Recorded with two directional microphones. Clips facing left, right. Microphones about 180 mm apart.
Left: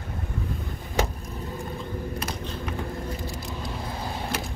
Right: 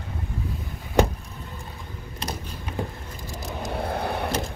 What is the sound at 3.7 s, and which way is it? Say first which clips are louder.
Vehicle: right 9 dB; 60° right (ahead or behind).